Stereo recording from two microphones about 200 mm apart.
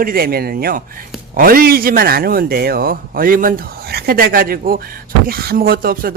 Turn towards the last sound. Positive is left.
turn(degrees=-45)  # may be behind; listen again after turning